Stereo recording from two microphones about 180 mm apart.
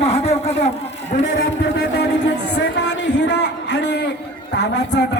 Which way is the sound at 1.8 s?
70° left (ahead or behind).